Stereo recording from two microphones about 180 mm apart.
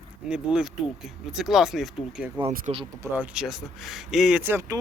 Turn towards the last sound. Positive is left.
turn(degrees=-15)  # may be behind; listen again after turning